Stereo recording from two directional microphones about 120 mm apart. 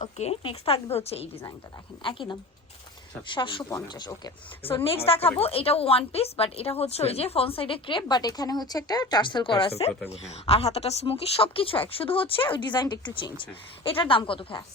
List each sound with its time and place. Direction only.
0.0 s a woman's voice: 60° left (ahead or behind)
2.0 s a woman's voice: 45° left (ahead or behind)
4.8 s a woman's voice: 55° left (ahead or behind)